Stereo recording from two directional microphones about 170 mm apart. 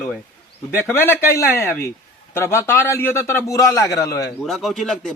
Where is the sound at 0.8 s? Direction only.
15° left (ahead or behind).